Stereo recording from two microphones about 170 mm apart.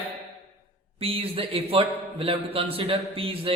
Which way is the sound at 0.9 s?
35° right (ahead or behind).